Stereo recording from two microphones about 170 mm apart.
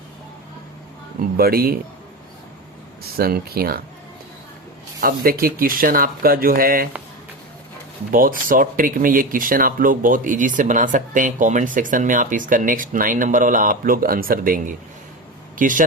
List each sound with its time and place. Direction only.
1.2 s speech: 60° right (ahead or behind)
3.2 s speech: 65° right (ahead or behind)
4.9 s speech: 60° right (ahead or behind)
8.1 s speech: 55° right (ahead or behind)